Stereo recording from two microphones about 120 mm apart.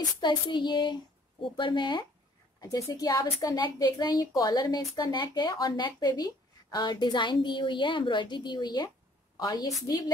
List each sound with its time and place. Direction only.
0.0 s speech: 35° left (ahead or behind)